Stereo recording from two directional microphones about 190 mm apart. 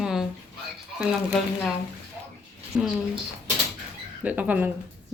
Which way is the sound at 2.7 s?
10° right (ahead or behind).